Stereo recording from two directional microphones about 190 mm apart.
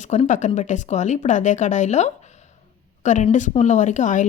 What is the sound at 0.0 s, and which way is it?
Speech, 40° left (ahead or behind).